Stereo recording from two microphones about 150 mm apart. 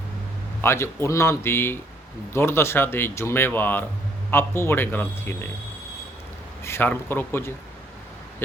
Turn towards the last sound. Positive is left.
turn(degrees=15)  # may be behind; listen again after turning